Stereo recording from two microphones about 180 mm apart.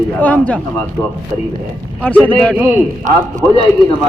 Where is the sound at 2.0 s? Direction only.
10° left (ahead or behind).